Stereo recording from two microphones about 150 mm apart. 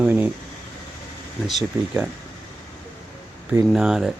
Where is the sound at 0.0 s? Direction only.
10° right (ahead or behind).